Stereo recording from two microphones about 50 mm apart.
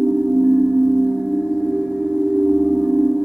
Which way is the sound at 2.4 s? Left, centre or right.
Centre.